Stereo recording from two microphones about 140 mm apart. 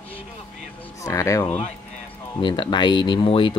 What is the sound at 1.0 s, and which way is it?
Speech, 25° left (ahead or behind).